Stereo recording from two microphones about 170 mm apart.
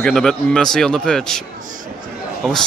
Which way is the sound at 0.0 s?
5° left (ahead or behind).